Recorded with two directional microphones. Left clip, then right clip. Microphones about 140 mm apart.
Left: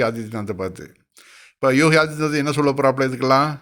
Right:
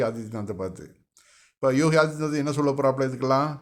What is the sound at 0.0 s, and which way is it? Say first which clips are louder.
A man's voice: left 5 dB; 25° left (ahead or behind).